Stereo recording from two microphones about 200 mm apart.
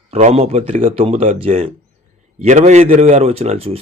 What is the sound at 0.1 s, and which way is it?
A man's voice, 30° right (ahead or behind).